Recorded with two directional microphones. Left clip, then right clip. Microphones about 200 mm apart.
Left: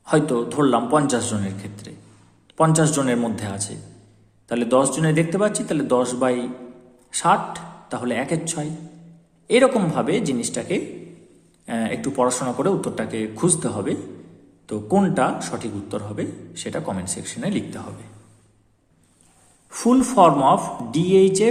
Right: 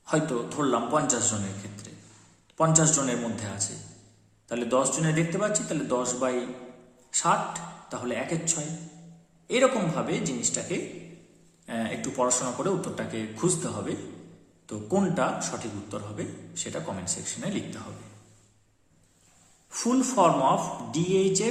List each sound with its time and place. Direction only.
0.0 s a man's voice: 40° left (ahead or behind)
19.7 s a man's voice: 40° left (ahead or behind)